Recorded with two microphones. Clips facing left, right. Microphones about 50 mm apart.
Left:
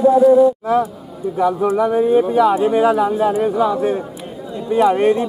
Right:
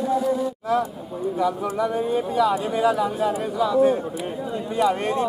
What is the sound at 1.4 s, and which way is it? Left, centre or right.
Speech, left.